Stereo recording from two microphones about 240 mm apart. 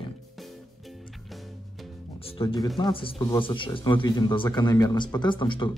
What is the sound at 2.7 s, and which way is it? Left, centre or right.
Speech, left.